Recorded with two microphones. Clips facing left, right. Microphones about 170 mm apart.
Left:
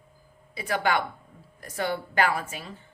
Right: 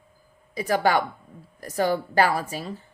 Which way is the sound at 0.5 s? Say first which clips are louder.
Right 4 dB; 40° right (ahead or behind).